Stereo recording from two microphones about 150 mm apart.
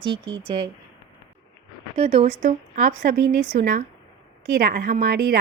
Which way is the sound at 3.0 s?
70° right (ahead or behind).